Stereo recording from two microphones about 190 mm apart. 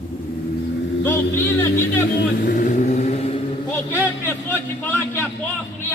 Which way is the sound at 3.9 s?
10° left (ahead or behind).